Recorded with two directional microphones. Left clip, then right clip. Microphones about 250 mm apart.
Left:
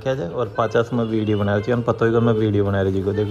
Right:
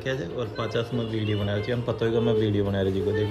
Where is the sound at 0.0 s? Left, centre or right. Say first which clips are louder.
Left 7 dB; centre.